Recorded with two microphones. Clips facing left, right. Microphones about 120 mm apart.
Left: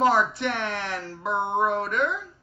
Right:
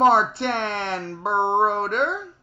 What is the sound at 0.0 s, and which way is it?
Speech, 30° right (ahead or behind).